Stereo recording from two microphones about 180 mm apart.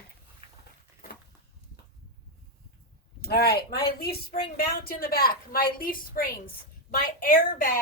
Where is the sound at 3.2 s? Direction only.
60° left (ahead or behind).